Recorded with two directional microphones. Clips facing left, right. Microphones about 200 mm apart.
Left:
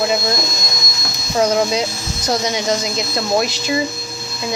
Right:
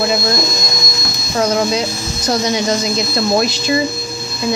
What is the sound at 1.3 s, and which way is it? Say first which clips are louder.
Speech: even; 15° left (ahead or behind).